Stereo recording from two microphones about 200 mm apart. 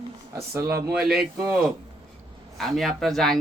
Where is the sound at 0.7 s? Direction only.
50° right (ahead or behind).